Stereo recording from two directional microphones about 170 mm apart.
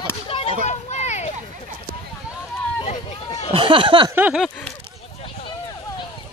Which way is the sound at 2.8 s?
40° left (ahead or behind).